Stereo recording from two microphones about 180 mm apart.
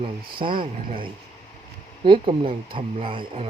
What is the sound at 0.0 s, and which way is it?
Speech, 30° right (ahead or behind).